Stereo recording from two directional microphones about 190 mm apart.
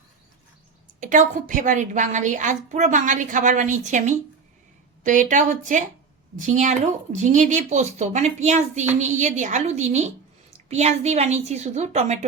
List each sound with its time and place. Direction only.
0.9 s a woman's voice: 40° right (ahead or behind)